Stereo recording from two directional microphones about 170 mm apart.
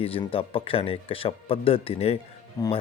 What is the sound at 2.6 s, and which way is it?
Speech, 20° left (ahead or behind).